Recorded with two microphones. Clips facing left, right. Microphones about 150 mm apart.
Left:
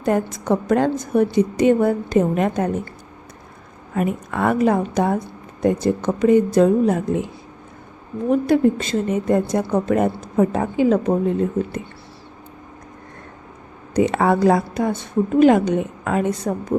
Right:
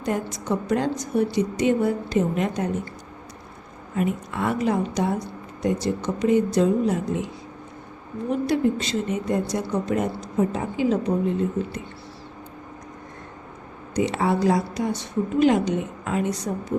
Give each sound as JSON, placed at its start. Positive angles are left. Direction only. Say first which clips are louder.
{"t": 0.0, "sound": "a woman's voice", "louder": "left 6 dB", "side_deg": 50}
{"t": 3.9, "sound": "a woman's voice", "louder": "left 3 dB", "side_deg": 50}
{"t": 8.3, "sound": "a woman's voice", "louder": "left 6 dB", "side_deg": 50}
{"t": 13.9, "sound": "a woman's voice", "louder": "left 5 dB", "side_deg": 50}